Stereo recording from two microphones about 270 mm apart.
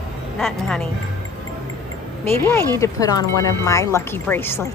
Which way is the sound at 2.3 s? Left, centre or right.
Centre.